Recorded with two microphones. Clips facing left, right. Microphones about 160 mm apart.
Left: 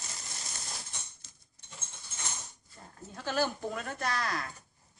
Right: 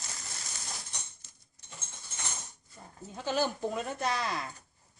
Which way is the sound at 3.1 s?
15° right (ahead or behind).